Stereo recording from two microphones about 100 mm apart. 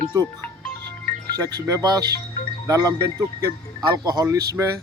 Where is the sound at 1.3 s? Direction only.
40° right (ahead or behind).